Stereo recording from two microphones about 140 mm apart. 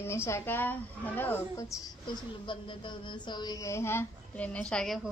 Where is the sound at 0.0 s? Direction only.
20° left (ahead or behind).